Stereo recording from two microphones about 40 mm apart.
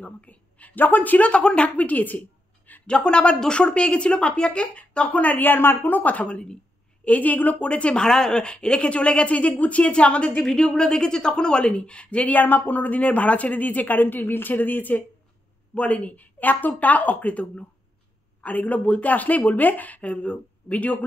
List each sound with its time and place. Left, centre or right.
0.0 s a woman's voice: left
1.3 s a woman's voice: left
1.8 s a sound: left
2.9 s a woman's voice: left
5.4 s speech: left
6.2 s a woman's voice: left
7.1 s speech: left
7.7 s speech: left
8.0 s a woman's voice: centre; by 10.4 s left
10.4 s a woman's voice: centre
12.3 s speech: left
15.7 s speech: left